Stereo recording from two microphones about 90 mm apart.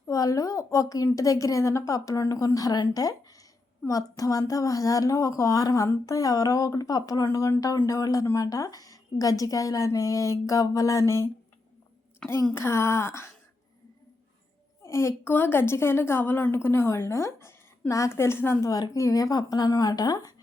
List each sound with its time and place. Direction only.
0.1 s a woman's voice: 40° left (ahead or behind)
4.2 s a woman's voice: 40° left (ahead or behind)
14.8 s a woman's voice: 35° left (ahead or behind)
18.6 s speech: 40° left (ahead or behind)